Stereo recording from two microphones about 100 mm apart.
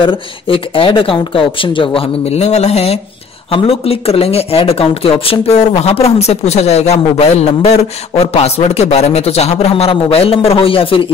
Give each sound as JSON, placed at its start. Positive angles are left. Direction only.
{"t": 0.0, "sound": "speech", "side_deg": 60}
{"t": 3.4, "sound": "a man's voice", "side_deg": 70}